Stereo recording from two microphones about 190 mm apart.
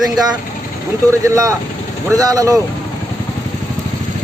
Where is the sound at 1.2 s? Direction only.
20° right (ahead or behind).